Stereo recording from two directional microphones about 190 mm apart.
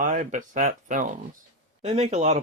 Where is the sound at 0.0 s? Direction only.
40° right (ahead or behind).